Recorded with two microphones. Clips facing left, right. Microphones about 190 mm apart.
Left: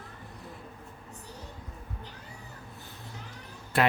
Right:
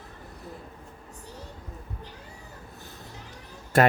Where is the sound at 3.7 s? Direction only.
45° right (ahead or behind).